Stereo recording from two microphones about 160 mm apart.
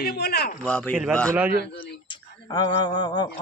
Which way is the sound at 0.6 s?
5° left (ahead or behind).